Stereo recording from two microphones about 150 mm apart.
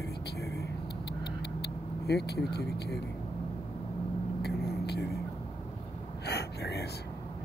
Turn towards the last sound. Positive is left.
turn(degrees=90)